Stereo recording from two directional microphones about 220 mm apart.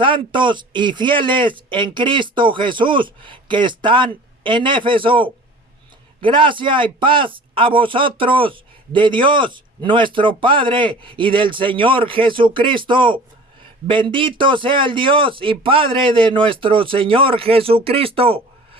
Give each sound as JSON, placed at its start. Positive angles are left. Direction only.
{"t": 0.0, "sound": "a man's voice", "side_deg": -20}